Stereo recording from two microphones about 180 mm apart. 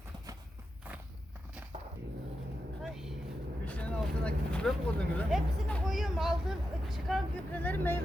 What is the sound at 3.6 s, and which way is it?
Speech, 5° left (ahead or behind).